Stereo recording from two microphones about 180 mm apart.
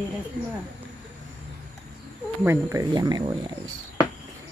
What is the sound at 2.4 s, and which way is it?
Speech, 20° right (ahead or behind).